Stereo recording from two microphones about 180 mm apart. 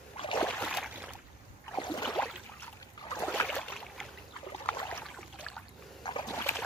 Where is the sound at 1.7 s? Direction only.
20° left (ahead or behind).